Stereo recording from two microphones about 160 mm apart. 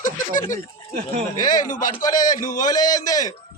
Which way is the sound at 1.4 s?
55° left (ahead or behind).